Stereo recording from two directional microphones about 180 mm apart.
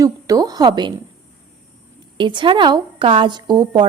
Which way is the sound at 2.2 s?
25° right (ahead or behind).